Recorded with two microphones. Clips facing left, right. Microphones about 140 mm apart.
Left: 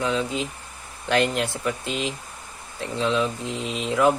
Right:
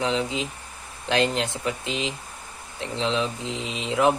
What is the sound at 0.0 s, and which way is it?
Speech, 20° right (ahead or behind).